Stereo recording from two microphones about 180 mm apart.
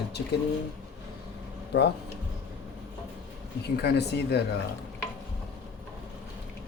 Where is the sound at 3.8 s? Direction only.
65° left (ahead or behind).